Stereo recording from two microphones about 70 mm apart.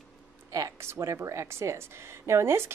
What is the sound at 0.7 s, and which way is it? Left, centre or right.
Speech, right.